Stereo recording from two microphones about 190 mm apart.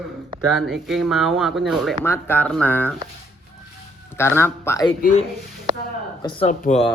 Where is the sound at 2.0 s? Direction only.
10° left (ahead or behind).